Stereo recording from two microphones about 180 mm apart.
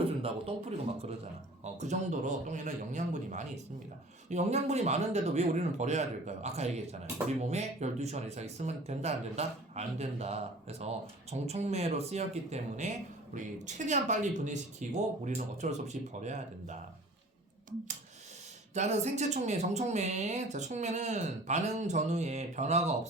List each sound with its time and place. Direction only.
0.0 s a man's voice: 30° right (ahead or behind)
18.7 s speech: 40° right (ahead or behind)